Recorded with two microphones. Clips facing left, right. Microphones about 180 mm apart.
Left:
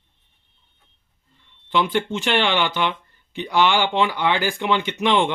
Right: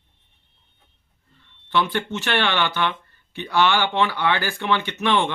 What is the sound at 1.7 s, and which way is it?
Speech, 15° left (ahead or behind).